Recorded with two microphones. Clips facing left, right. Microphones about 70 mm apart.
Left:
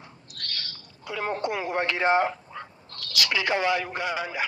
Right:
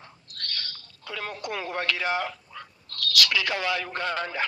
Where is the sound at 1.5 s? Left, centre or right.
Centre.